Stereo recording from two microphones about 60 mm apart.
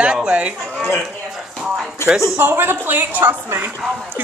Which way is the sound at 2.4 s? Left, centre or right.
Right.